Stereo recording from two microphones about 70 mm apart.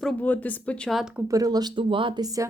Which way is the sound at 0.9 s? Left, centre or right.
Centre.